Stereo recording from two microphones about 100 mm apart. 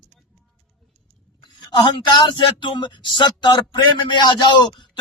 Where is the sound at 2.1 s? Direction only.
45° left (ahead or behind).